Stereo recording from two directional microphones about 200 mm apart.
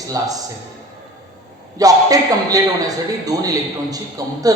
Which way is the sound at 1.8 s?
20° right (ahead or behind).